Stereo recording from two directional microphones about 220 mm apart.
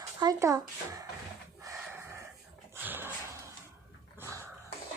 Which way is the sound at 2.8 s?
10° right (ahead or behind).